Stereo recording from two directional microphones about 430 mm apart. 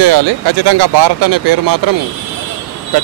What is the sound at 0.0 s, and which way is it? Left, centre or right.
Speech, right.